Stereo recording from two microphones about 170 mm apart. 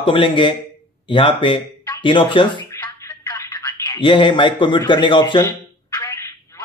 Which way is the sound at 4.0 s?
30° left (ahead or behind).